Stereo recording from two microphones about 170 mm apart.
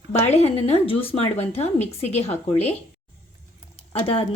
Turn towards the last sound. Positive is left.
turn(degrees=35)  # may be behind; listen again after turning